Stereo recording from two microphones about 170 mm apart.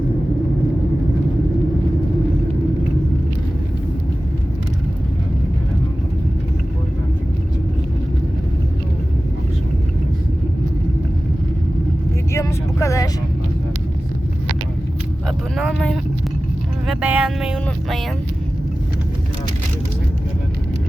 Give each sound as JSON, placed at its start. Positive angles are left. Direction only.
{"t": 12.3, "sound": "vehicle", "side_deg": 20}
{"t": 15.5, "sound": "vehicle", "side_deg": 0}